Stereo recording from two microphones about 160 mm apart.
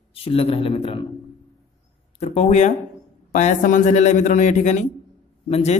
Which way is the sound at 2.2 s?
40° left (ahead or behind).